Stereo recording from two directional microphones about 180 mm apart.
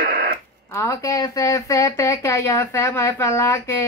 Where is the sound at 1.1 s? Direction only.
15° left (ahead or behind).